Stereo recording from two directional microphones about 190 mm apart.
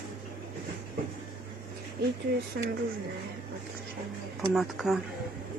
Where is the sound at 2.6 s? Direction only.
60° right (ahead or behind).